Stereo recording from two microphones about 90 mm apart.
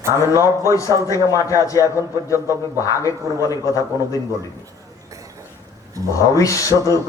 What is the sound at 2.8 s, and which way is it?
Speech, 40° left (ahead or behind).